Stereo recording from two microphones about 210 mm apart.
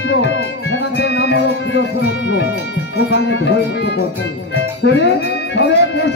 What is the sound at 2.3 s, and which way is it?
Speech, 55° left (ahead or behind).